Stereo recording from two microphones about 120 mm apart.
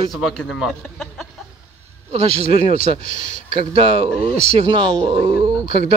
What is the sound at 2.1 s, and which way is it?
Speech, 60° right (ahead or behind).